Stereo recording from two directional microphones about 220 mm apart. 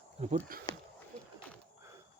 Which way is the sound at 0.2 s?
30° right (ahead or behind).